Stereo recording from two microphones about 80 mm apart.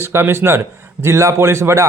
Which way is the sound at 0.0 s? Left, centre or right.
Right.